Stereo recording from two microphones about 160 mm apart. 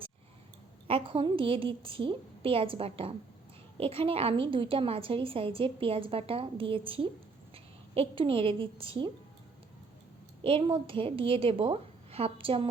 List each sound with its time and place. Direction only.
0.9 s a woman's voice: 35° right (ahead or behind)
10.4 s a woman's voice: 35° right (ahead or behind)